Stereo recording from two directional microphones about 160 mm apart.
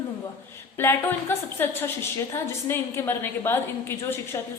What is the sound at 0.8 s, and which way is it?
A woman's voice, 15° left (ahead or behind).